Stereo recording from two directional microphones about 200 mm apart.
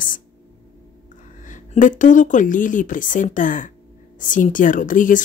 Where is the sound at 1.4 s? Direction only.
40° left (ahead or behind).